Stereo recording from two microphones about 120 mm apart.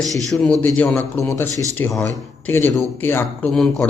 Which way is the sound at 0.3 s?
5° left (ahead or behind).